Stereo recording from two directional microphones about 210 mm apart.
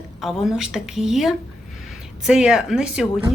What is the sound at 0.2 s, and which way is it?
A woman's voice, centre (ahead or behind).